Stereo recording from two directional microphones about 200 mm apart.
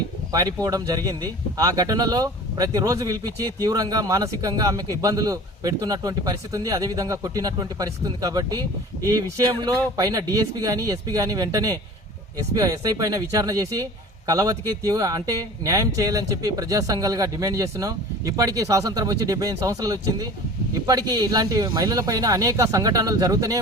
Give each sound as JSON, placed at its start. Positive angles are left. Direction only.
{"t": 0.3, "sound": "speech", "side_deg": -20}